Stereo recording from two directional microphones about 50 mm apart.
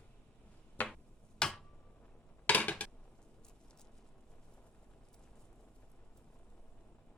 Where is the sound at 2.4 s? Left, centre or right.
Left.